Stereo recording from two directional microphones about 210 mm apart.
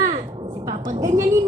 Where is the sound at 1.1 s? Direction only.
15° right (ahead or behind).